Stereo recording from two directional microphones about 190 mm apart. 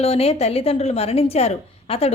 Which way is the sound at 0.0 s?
30° left (ahead or behind).